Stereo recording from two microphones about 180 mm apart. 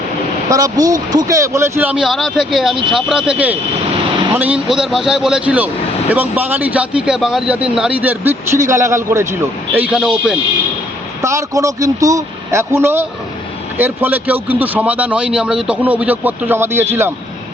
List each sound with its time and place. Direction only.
0.5 s speech: 20° right (ahead or behind); by 10.3 s 5° right (ahead or behind)
11.2 s speech: 15° right (ahead or behind)